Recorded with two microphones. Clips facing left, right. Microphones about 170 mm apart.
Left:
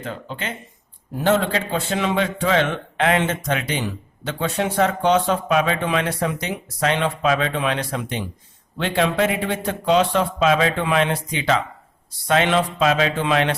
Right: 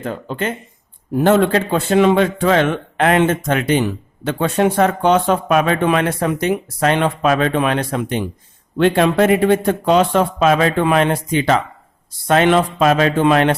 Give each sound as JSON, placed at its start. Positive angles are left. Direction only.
{"t": 0.0, "sound": "a man's voice", "side_deg": -50}